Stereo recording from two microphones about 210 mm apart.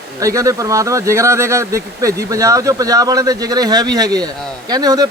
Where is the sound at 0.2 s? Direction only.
15° right (ahead or behind).